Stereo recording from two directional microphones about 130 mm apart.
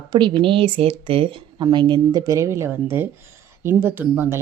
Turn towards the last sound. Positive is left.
turn(degrees=-15)  # may be behind; listen again after turning